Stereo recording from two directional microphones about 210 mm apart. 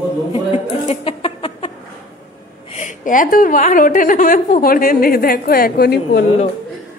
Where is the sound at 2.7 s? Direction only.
35° left (ahead or behind); by 6.2 s 50° left (ahead or behind).